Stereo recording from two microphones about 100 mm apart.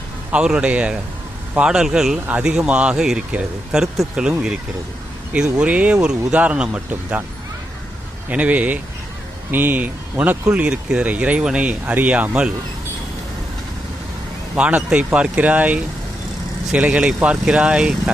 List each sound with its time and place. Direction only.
0.3 s speech: 10° right (ahead or behind)
8.3 s speech: 15° right (ahead or behind)
14.5 s speech: 15° right (ahead or behind)